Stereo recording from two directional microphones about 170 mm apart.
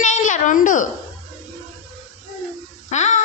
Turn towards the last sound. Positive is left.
turn(degrees=40)  # may be behind; listen again after turning